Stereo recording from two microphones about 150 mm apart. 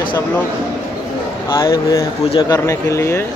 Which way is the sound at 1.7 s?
20° left (ahead or behind).